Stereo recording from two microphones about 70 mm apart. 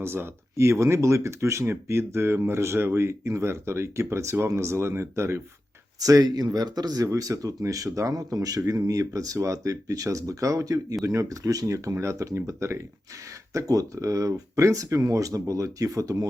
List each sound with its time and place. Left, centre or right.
0.0 s speech: right
6.0 s speech: right
6.2 s speech: right